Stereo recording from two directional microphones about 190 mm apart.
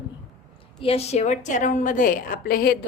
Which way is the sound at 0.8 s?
30° left (ahead or behind).